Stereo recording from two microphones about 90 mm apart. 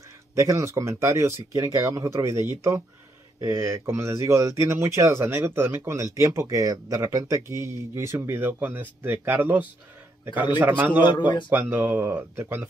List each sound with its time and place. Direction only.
0.4 s a man's voice: 35° right (ahead or behind); by 11.0 s 20° right (ahead or behind)
11.0 s a man's voice: 55° left (ahead or behind)
11.5 s speech: 20° right (ahead or behind)